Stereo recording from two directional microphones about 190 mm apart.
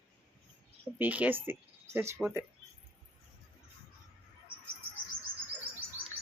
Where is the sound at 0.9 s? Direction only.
10° right (ahead or behind).